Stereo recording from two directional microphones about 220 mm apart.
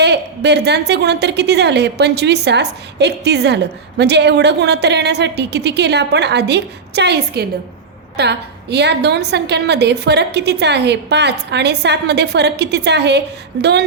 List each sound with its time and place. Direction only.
0.0 s a woman's voice: 50° right (ahead or behind)